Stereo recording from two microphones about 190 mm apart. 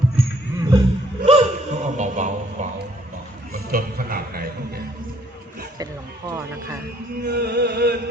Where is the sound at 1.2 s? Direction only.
35° right (ahead or behind).